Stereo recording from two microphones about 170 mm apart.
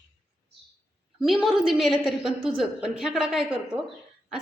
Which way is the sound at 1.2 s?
Centre (ahead or behind).